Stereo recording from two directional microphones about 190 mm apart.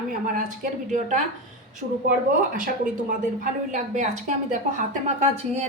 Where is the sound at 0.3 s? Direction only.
40° right (ahead or behind).